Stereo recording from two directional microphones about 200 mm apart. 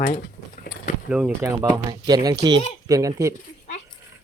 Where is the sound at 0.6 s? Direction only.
45° left (ahead or behind).